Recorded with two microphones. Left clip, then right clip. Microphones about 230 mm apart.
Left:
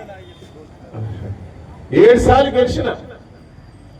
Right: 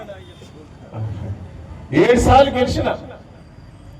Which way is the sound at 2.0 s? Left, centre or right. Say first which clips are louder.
Left 1 dB; right.